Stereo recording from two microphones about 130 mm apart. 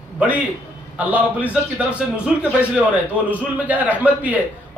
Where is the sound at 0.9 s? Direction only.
10° right (ahead or behind).